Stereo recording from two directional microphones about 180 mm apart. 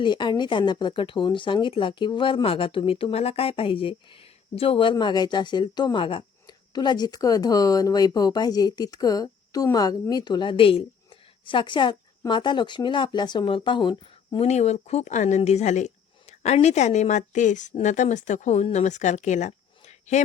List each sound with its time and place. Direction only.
0.0 s speech: 25° left (ahead or behind)
14.4 s speech: 40° left (ahead or behind)